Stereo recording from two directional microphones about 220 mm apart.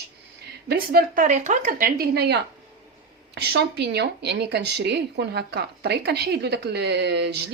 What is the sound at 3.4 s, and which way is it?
Speech, 45° right (ahead or behind).